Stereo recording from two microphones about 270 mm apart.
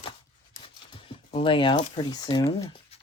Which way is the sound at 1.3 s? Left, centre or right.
Centre.